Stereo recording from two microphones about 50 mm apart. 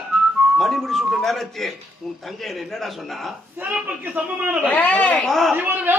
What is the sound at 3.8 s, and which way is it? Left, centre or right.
Speech, right.